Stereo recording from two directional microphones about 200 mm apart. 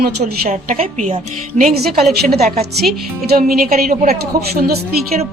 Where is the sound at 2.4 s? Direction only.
50° right (ahead or behind).